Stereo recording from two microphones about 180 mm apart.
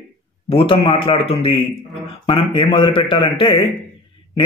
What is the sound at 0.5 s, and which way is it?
A man's voice, 30° left (ahead or behind).